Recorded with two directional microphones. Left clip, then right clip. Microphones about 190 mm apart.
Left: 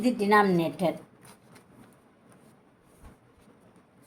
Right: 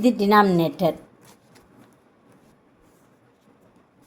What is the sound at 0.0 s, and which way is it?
Speech, 35° right (ahead or behind).